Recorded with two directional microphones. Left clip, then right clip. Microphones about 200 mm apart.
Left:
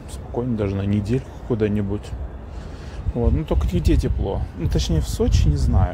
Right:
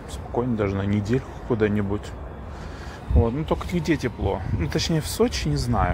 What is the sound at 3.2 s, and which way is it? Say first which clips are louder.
Speech: even; 25° left (ahead or behind).